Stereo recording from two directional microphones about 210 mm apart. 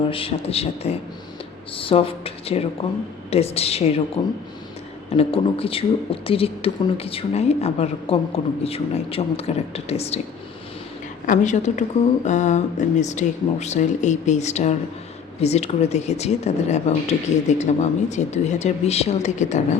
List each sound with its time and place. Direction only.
0.1 s speech: 25° left (ahead or behind)
11.3 s speech: 35° left (ahead or behind)